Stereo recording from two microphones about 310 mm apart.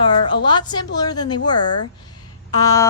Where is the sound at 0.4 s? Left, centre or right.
Centre.